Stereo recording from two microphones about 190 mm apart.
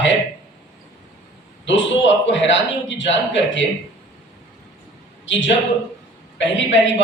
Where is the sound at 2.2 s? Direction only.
75° left (ahead or behind).